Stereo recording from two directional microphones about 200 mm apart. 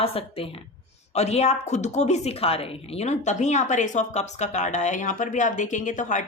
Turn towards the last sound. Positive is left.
turn(degrees=40)  # may be behind; listen again after turning